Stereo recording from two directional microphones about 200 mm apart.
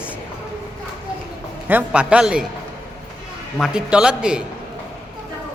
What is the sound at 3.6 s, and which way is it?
Speech, 5° right (ahead or behind).